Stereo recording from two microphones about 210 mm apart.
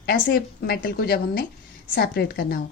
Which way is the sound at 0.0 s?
45° left (ahead or behind).